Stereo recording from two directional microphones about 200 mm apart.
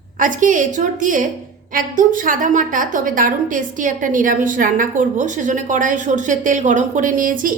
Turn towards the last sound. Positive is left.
turn(degrees=-45)  # may be behind; listen again after turning